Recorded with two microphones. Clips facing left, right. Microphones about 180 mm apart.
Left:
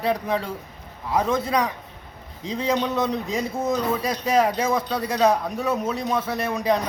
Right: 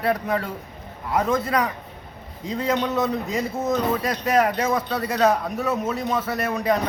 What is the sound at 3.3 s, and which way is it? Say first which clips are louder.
Speech: even; 5° right (ahead or behind).